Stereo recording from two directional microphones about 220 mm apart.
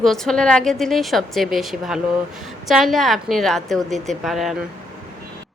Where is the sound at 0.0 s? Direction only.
Centre (ahead or behind).